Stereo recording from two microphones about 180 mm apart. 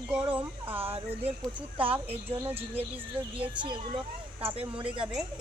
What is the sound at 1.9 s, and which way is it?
Speech, 10° right (ahead or behind).